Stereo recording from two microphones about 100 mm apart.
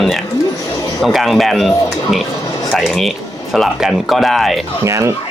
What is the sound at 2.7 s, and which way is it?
Speech, centre (ahead or behind).